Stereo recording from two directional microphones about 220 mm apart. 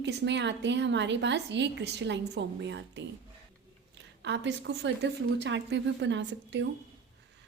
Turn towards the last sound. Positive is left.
turn(degrees=-55)  # may be behind; listen again after turning